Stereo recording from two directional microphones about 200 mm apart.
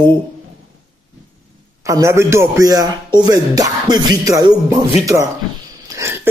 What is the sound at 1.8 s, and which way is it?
A man's voice, 15° right (ahead or behind).